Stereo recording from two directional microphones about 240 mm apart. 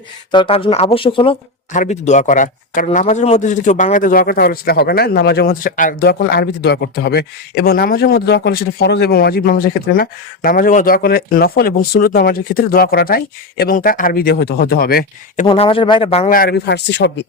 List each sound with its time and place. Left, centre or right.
0.3 s speech: left
15.4 s speech: left